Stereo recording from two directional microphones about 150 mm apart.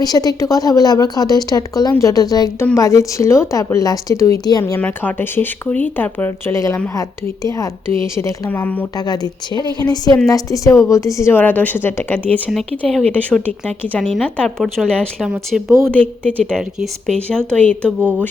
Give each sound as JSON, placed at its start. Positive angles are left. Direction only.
{"t": 0.0, "sound": "a woman's voice", "side_deg": 25}
{"t": 4.6, "sound": "a woman's voice", "side_deg": 10}
{"t": 9.0, "sound": "a woman's voice", "side_deg": 25}
{"t": 15.8, "sound": "speech", "side_deg": 10}